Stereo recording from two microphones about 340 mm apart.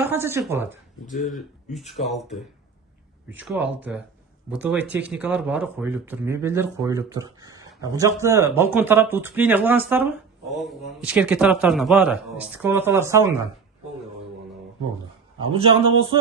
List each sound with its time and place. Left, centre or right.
0.0 s speech: centre
15.5 s speech: centre